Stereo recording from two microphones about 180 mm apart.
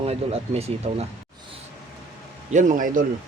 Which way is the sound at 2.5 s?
45° right (ahead or behind).